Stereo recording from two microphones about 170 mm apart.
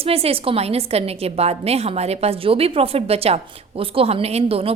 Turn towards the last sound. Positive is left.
turn(degrees=-35)  # may be behind; listen again after turning